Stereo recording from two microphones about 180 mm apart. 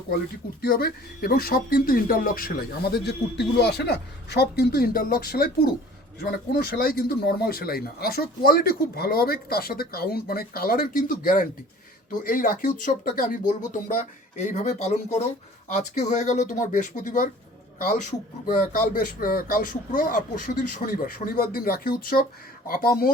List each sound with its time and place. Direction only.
0.6 s speech: 55° left (ahead or behind); by 21.0 s 35° left (ahead or behind)
21.3 s speech: 55° left (ahead or behind)